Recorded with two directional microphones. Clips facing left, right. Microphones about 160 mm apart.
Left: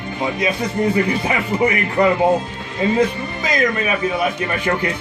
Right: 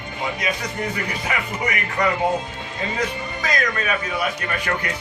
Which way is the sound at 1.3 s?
30° left (ahead or behind).